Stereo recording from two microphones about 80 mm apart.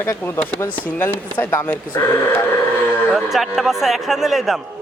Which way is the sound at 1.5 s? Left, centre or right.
Left.